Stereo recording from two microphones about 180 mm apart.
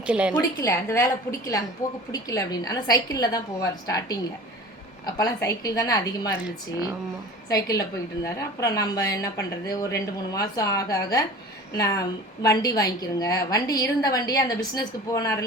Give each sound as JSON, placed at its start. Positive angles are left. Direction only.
{"t": 0.0, "sound": "a woman's voice", "side_deg": -5}
{"t": 0.6, "sound": "a woman's voice", "side_deg": 15}
{"t": 7.5, "sound": "a woman's voice", "side_deg": 20}